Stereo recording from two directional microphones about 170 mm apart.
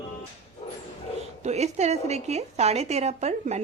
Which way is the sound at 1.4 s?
40° right (ahead or behind).